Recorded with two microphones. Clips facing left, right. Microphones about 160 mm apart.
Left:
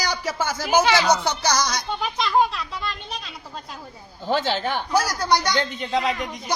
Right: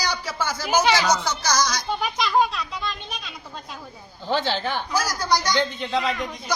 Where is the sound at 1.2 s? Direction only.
60° left (ahead or behind).